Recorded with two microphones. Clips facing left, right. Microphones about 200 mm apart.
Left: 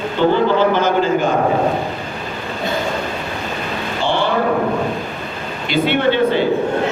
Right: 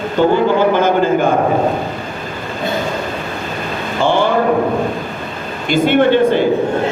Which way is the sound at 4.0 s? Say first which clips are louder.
Right 5 dB; 50° right (ahead or behind).